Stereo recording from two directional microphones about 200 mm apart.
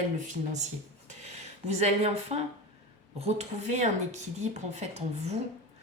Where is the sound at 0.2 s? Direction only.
40° right (ahead or behind).